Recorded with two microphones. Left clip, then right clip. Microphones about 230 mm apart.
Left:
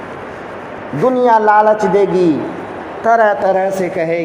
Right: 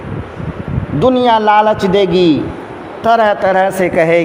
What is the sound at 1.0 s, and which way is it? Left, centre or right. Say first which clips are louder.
Speech: right 1 dB; right.